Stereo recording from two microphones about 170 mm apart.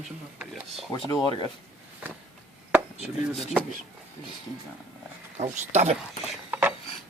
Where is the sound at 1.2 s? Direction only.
25° left (ahead or behind).